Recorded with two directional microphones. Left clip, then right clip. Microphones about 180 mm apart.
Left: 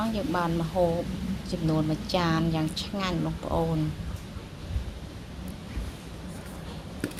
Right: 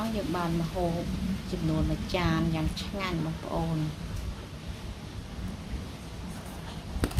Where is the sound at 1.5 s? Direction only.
25° left (ahead or behind).